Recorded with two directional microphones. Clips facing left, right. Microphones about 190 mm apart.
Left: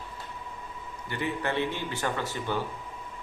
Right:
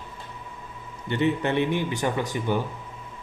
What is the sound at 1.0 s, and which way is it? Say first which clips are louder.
Speech: right 7 dB; 25° right (ahead or behind).